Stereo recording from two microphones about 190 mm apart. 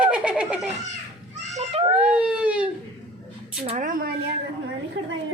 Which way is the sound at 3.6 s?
30° right (ahead or behind).